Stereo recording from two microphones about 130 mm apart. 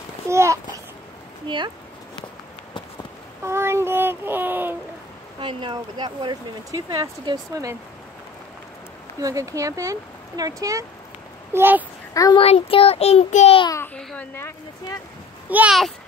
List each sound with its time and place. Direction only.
0.3 s speech: 20° right (ahead or behind)
1.5 s speech: 35° right (ahead or behind)
3.4 s speech: 20° right (ahead or behind)
5.4 s speech: 40° right (ahead or behind); by 7.7 s 25° right (ahead or behind)
9.2 s speech: 25° right (ahead or behind)
11.5 s speech: 15° right (ahead or behind)
12.1 s a woman's voice: 25° left (ahead or behind)
12.4 s a child's voice: 45° left (ahead or behind)
13.9 s a woman's voice: 15° left (ahead or behind)
15.5 s speech: 10° right (ahead or behind)